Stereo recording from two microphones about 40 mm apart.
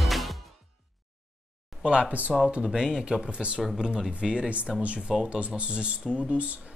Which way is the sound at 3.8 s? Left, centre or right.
Centre.